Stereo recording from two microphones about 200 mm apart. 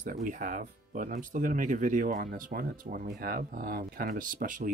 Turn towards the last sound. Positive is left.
turn(degrees=-40)  # may be behind; listen again after turning